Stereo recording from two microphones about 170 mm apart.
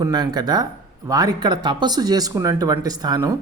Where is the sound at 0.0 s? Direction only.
25° right (ahead or behind).